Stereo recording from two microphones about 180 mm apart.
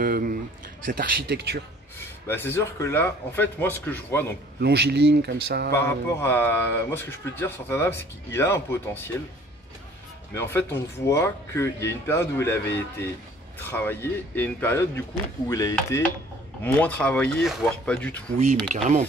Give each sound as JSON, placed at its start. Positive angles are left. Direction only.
{"t": 0.0, "sound": "a sound", "side_deg": -55}
{"t": 0.8, "sound": "speech", "side_deg": -60}
{"t": 2.0, "sound": "a man's voice", "side_deg": 10}
{"t": 4.6, "sound": "speech", "side_deg": -65}
{"t": 5.7, "sound": "a man's voice", "side_deg": 15}
{"t": 10.3, "sound": "a man's voice", "side_deg": 10}